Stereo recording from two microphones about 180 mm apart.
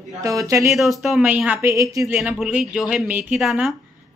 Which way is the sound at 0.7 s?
Centre (ahead or behind).